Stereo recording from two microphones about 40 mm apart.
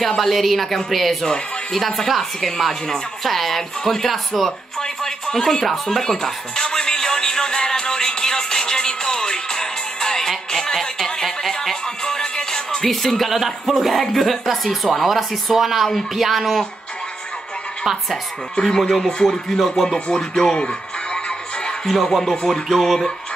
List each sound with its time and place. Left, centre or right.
0.2 s speech: centre
5.0 s music: centre
11.2 s speech: centre
12.0 s music: centre
13.3 s speech: centre
18.6 s music: centre
19.9 s speech: centre
21.8 s music: centre
22.7 s speech: centre